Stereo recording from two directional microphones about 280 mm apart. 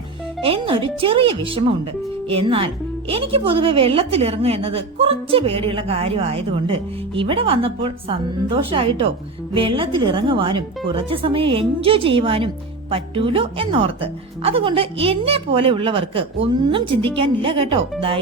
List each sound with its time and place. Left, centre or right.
0.4 s a woman's voice: centre